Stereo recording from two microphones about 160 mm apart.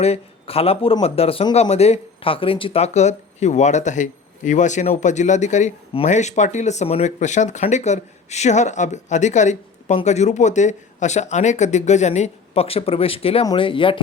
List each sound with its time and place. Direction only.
0.0 s a man's voice: 40° left (ahead or behind)